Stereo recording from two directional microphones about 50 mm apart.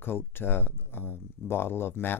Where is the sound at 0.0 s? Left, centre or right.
Left.